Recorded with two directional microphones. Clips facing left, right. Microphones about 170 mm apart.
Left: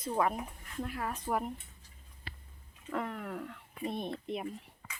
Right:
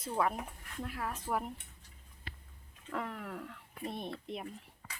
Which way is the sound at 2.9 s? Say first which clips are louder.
Left 3 dB; centre (ahead or behind).